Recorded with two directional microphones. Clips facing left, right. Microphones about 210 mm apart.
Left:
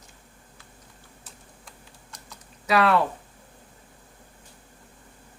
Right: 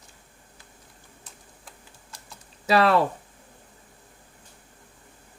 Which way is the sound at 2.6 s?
35° right (ahead or behind).